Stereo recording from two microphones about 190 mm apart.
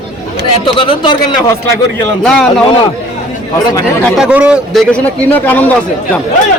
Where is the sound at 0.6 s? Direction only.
25° left (ahead or behind).